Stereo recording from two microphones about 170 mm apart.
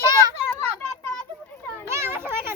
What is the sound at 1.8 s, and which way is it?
Children playing, 15° right (ahead or behind).